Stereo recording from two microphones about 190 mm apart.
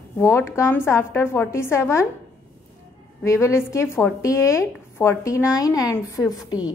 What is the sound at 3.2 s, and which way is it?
A woman's voice, 15° left (ahead or behind).